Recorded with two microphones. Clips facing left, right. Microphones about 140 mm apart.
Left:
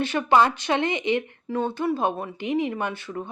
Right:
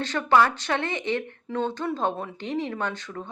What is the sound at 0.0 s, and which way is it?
A woman's voice, 10° left (ahead or behind).